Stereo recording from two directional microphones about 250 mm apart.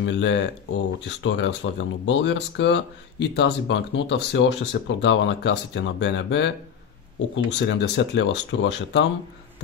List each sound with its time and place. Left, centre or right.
0.0 s speech: left
7.5 s speech: left